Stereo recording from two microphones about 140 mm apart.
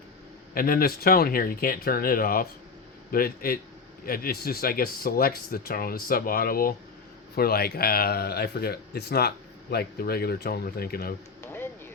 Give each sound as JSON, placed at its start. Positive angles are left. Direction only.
{"t": 0.5, "sound": "speech", "side_deg": 90}
{"t": 10.0, "sound": "speech", "side_deg": 90}